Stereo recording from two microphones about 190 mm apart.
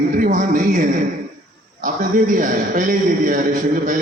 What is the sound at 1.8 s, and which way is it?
A man's voice, 45° right (ahead or behind).